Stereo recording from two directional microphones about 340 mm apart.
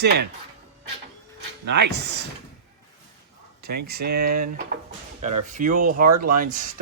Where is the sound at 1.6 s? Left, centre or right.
Right.